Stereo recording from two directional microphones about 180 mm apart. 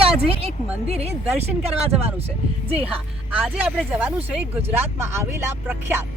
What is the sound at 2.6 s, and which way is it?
Speech, 30° right (ahead or behind).